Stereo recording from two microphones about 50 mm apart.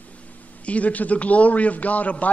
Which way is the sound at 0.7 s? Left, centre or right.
Left.